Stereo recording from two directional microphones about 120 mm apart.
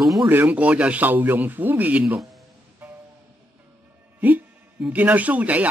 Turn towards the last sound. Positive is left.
turn(degrees=-10)  # may be behind; listen again after turning